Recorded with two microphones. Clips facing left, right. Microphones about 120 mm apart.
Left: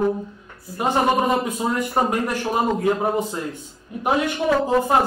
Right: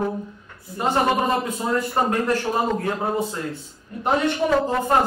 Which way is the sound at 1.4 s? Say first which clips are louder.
Even; 15° left (ahead or behind).